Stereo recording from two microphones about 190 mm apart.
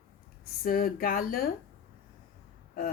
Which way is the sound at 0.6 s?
50° left (ahead or behind).